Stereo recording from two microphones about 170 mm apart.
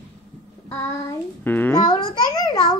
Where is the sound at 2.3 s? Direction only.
20° left (ahead or behind).